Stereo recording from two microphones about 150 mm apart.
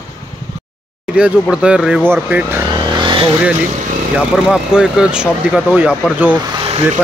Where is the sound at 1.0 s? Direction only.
5° right (ahead or behind).